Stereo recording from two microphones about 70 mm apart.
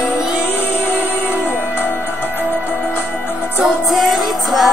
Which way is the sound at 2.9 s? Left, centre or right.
Left.